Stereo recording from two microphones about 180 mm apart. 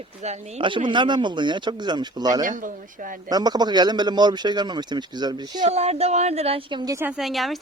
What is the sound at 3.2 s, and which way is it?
Speech, 20° right (ahead or behind).